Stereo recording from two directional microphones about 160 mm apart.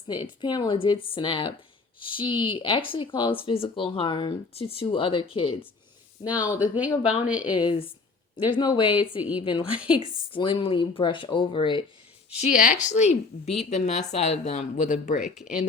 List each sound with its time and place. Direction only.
0.1 s speech: 30° left (ahead or behind)
6.2 s speech: 10° right (ahead or behind)
7.6 s speech: 35° left (ahead or behind)
9.7 s speech: 5° right (ahead or behind)
10.0 s speech: 25° right (ahead or behind)
10.3 s speech: 35° left (ahead or behind)
12.5 s speech: 50° left (ahead or behind)
15.2 s speech: centre (ahead or behind)